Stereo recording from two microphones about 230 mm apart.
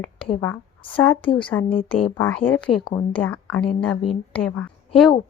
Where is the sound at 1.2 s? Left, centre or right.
Left.